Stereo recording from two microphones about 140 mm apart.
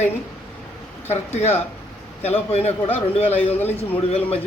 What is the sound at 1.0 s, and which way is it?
A man's voice, 50° left (ahead or behind).